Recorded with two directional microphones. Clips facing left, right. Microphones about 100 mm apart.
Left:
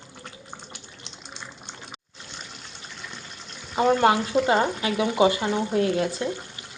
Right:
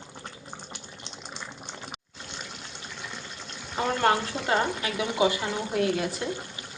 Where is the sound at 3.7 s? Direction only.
15° left (ahead or behind).